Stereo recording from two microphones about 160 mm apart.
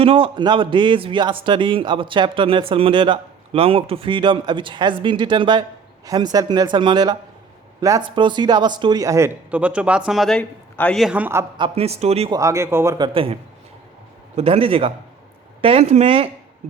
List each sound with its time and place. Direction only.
0.0 s speech: 35° right (ahead or behind); by 11.0 s 5° left (ahead or behind)
11.0 s a man's voice: 10° right (ahead or behind)
11.5 s speech: 35° right (ahead or behind)
12.3 s speech: 20° right (ahead or behind)
14.3 s speech: 35° right (ahead or behind)